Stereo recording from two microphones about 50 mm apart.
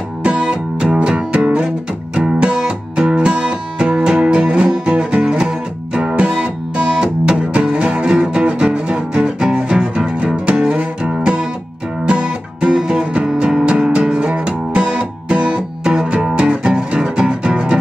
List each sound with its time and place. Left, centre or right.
0.2 s music: centre